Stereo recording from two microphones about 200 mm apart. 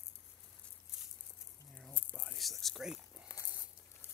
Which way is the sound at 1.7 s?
5° left (ahead or behind).